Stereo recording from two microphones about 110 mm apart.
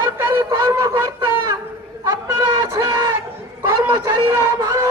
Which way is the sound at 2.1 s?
25° right (ahead or behind).